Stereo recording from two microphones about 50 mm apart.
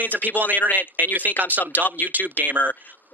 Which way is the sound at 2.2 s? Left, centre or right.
Left.